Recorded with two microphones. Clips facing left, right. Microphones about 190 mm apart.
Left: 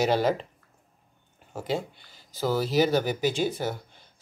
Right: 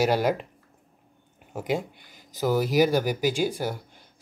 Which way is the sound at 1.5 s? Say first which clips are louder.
Right 2 dB; 15° right (ahead or behind).